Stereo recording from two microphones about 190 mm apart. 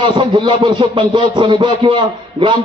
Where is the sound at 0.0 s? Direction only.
25° right (ahead or behind).